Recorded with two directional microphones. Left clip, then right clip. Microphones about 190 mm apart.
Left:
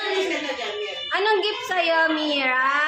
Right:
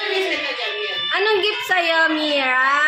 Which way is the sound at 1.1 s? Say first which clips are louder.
Right 2 dB; 25° right (ahead or behind).